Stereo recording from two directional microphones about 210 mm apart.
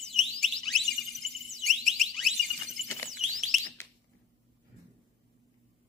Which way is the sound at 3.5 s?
Centre (ahead or behind).